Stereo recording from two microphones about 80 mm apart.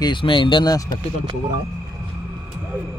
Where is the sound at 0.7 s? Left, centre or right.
Left.